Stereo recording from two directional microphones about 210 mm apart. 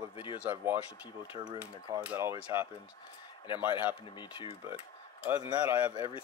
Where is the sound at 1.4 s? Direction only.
20° right (ahead or behind).